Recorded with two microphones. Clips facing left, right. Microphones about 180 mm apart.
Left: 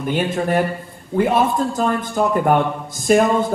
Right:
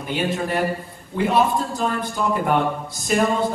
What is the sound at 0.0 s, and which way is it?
A man's voice, 50° left (ahead or behind).